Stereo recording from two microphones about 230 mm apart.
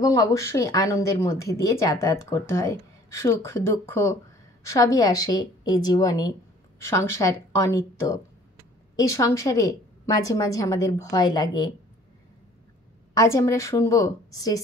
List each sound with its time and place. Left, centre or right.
0.0 s speech: centre
13.1 s speech: centre